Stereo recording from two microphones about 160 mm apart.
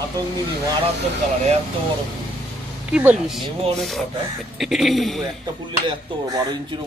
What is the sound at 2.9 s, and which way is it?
Speech, 5° right (ahead or behind).